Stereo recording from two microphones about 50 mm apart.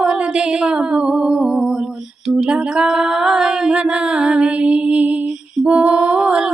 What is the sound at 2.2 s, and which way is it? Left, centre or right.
Female singing, centre.